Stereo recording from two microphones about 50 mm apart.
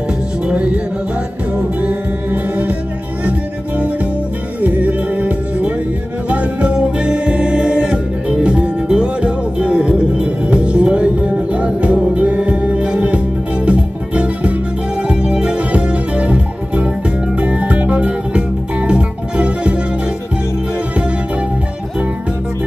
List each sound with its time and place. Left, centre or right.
0.5 s music: right
1.8 s music: right